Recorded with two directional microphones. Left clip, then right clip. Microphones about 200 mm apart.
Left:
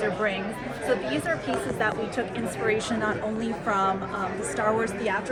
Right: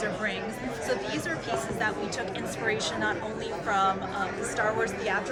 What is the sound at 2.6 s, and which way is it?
Speech, 45° left (ahead or behind).